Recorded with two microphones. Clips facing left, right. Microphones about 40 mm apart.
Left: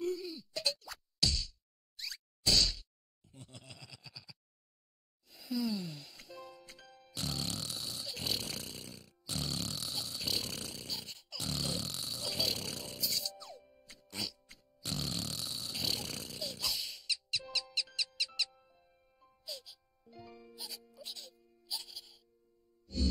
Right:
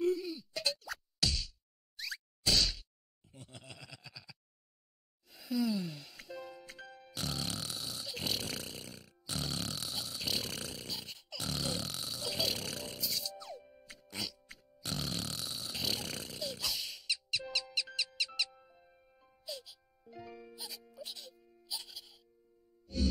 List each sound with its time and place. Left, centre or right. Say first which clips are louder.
0.0 s groan: right 4 dB; centre
2.0 s whack: right 3 dB; centre
3.3 s a sound: right 2 dB; centre
5.3 s music: right 2 dB; centre
9.8 s a sound: even; centre
14.9 s snoring: even; centre
18.2 s music: right 1 dB; centre